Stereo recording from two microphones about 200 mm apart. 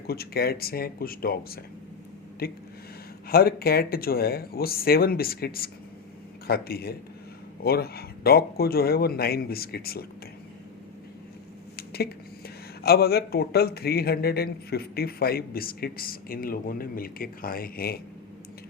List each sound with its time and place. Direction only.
0.1 s speech: 50° left (ahead or behind)
11.8 s a sound: 50° left (ahead or behind)
12.8 s speech: 50° left (ahead or behind)